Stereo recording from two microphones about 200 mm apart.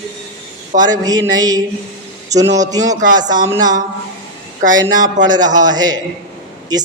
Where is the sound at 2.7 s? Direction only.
20° right (ahead or behind).